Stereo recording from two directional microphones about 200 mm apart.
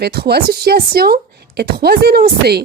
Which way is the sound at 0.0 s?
55° right (ahead or behind).